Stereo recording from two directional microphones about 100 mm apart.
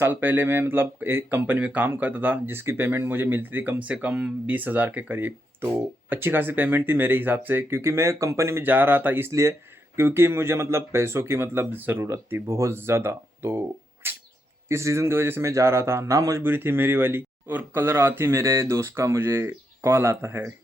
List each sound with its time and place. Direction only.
0.0 s speech: 20° right (ahead or behind)
16.4 s speech: 20° right (ahead or behind)